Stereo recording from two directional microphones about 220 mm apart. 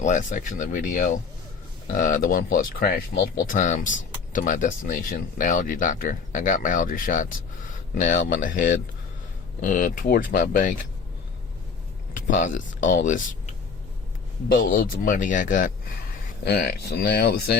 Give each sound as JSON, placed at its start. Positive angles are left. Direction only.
{"t": 0.0, "sound": "speech", "side_deg": 35}
{"t": 12.1, "sound": "speech", "side_deg": 35}
{"t": 16.4, "sound": "speech", "side_deg": 45}